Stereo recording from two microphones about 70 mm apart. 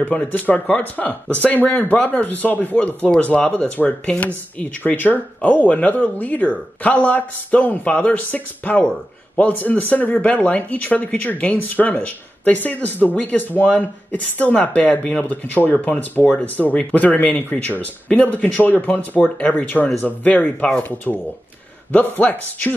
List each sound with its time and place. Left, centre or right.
0.1 s speech: left
16.7 s speech: left
21.1 s speech: centre
21.9 s speech: left